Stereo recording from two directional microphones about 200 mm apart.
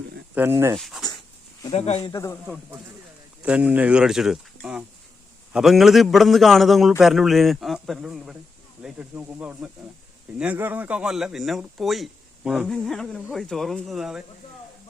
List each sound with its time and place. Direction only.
0.3 s speech: 10° right (ahead or behind)
0.8 s speech: centre (ahead or behind)
1.7 s speech: 30° left (ahead or behind)
3.4 s speech: 5° right (ahead or behind)